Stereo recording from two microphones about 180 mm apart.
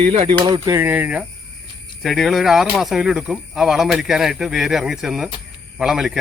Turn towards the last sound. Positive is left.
turn(degrees=0)  # may be behind; listen again after turning